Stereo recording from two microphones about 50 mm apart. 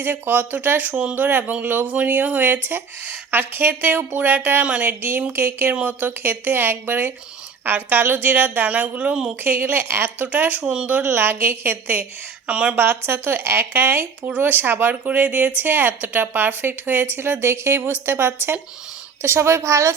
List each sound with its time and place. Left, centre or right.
0.0 s speech: right
4.6 s speech: right
4.9 s speech: right
8.7 s speech: right
12.5 s speech: right
12.7 s speech: right
14.3 s speech: right
15.0 s speech: right
17.4 s a woman's voice: right
19.2 s a woman's voice: right